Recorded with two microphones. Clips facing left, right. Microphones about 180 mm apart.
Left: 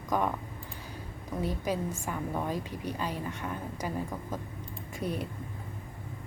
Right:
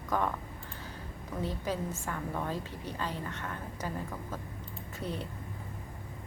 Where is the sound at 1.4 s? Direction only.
10° left (ahead or behind).